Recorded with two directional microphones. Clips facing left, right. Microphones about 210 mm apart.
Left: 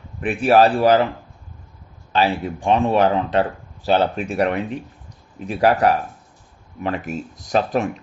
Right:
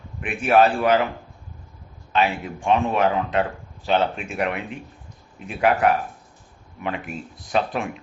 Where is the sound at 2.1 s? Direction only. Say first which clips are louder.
Left 3 dB; 35° left (ahead or behind).